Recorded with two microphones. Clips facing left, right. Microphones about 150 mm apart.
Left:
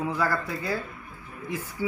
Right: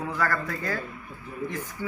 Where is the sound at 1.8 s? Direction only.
10° left (ahead or behind).